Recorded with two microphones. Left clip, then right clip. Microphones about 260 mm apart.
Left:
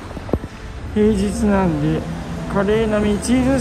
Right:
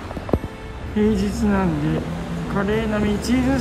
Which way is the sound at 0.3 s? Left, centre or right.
Left.